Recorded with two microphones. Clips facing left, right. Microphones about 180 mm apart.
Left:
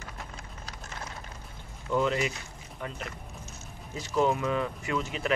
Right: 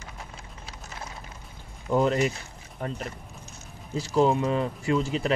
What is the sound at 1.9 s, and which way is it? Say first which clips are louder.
Speech: right 4 dB; 40° right (ahead or behind).